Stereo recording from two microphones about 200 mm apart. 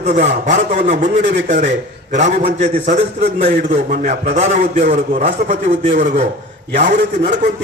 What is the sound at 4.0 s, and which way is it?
A man's voice, 35° right (ahead or behind).